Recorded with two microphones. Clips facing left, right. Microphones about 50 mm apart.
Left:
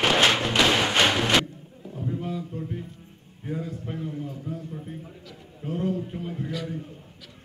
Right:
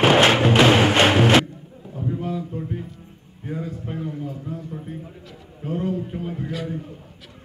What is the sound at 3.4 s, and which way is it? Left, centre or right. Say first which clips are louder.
A man's voice: right 2 dB; centre.